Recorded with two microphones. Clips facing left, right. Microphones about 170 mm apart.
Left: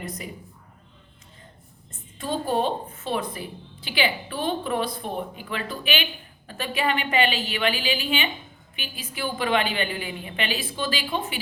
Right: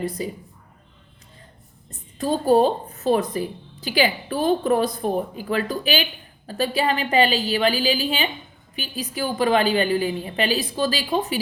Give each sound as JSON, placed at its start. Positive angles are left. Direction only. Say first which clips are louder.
{"t": 0.0, "sound": "a woman's voice", "louder": "right 8 dB", "side_deg": -30}
{"t": 1.9, "sound": "a woman's voice", "louder": "right 6 dB", "side_deg": -40}